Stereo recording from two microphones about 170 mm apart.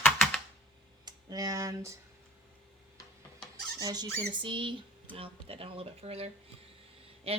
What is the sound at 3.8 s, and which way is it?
Speech, 25° right (ahead or behind).